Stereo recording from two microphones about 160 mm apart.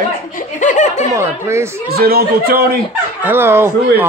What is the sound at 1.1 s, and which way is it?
Speech, 15° right (ahead or behind).